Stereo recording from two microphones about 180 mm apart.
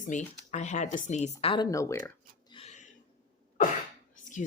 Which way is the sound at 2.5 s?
35° left (ahead or behind).